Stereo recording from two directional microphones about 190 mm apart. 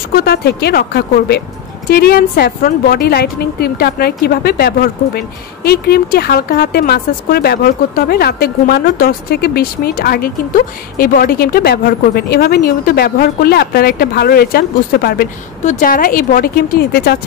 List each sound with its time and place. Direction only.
0.1 s a woman's voice: 55° left (ahead or behind)
15.6 s speech: 40° left (ahead or behind); by 17.2 s 55° left (ahead or behind)